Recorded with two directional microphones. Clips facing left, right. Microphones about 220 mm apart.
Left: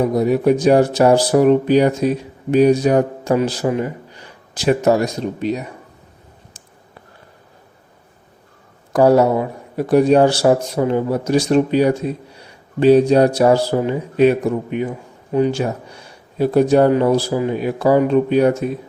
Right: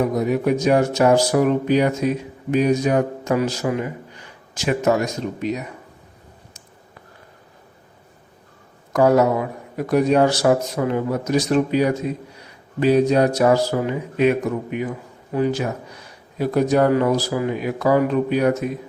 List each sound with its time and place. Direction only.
0.0 s a man's voice: 35° left (ahead or behind)
8.9 s a man's voice: 30° left (ahead or behind)